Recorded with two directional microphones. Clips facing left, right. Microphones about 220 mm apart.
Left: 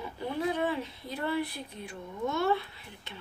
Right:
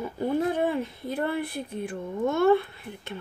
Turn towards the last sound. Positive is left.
turn(degrees=-50)  # may be behind; listen again after turning